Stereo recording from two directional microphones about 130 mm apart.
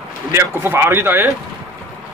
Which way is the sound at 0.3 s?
15° right (ahead or behind).